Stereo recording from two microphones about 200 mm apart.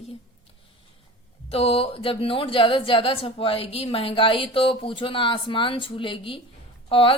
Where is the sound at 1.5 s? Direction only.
30° left (ahead or behind).